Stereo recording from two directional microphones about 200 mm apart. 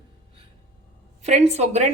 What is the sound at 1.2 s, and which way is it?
Speech, 35° right (ahead or behind).